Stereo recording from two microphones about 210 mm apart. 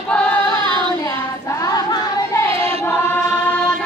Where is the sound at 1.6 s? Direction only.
20° left (ahead or behind).